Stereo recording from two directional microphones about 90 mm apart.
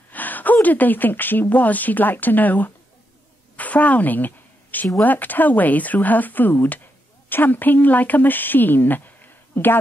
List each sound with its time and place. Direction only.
0.1 s speech: 20° left (ahead or behind)
3.5 s a sound: 15° left (ahead or behind)
5.0 s speech: 20° left (ahead or behind)